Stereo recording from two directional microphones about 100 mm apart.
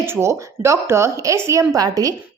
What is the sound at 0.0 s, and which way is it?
A woman's voice, 25° right (ahead or behind).